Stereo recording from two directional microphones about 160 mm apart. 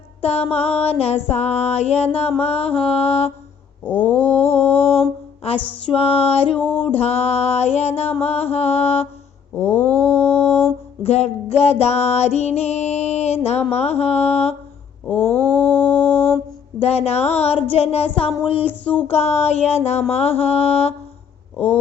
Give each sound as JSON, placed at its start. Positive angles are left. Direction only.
{"t": 0.2, "sound": "music", "side_deg": 40}
{"t": 3.8, "sound": "a sound", "side_deg": 10}
{"t": 5.8, "sound": "music", "side_deg": 35}
{"t": 6.6, "sound": "a sound", "side_deg": 10}
{"t": 6.9, "sound": "music", "side_deg": 40}
{"t": 9.6, "sound": "mantra", "side_deg": 10}
{"t": 11.0, "sound": "music", "side_deg": 40}
{"t": 15.0, "sound": "mantra", "side_deg": 10}
{"t": 16.8, "sound": "music", "side_deg": 40}
{"t": 18.7, "sound": "a sound", "side_deg": 10}
{"t": 19.0, "sound": "music", "side_deg": 40}